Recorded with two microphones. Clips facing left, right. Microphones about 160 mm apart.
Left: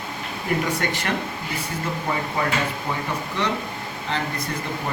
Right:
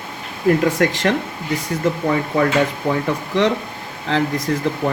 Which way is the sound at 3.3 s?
90° right.